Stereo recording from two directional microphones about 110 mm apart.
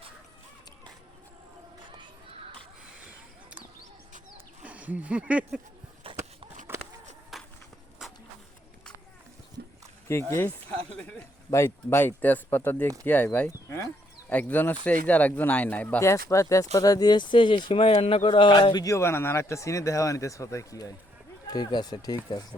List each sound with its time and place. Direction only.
4.6 s speech: 15° right (ahead or behind)
6.7 s a sound: 20° right (ahead or behind)
7.3 s walk: centre (ahead or behind)
10.1 s speech: 25° left (ahead or behind)
11.5 s speech: 20° left (ahead or behind)
13.5 s a sound: 25° left (ahead or behind)
14.3 s speech: 15° left (ahead or behind)
16.0 s speech: 25° left (ahead or behind)
18.9 s speech: 20° left (ahead or behind)